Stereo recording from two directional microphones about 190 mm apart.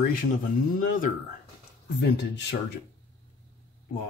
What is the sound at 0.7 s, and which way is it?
Speech, 45° left (ahead or behind).